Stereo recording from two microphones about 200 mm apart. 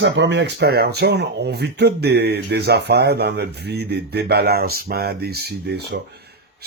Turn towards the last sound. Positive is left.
turn(degrees=-55)  # may be behind; listen again after turning